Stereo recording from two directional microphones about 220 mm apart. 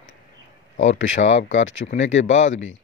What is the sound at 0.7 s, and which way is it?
Speech, 60° left (ahead or behind).